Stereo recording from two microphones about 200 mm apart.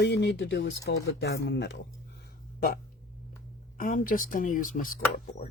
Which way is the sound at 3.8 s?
45° left (ahead or behind).